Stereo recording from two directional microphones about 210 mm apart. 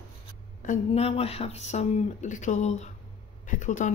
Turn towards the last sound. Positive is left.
turn(degrees=35)  # may be behind; listen again after turning